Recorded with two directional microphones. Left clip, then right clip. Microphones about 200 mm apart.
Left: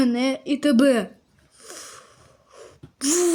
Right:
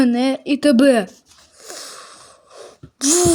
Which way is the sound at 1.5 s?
20° right (ahead or behind).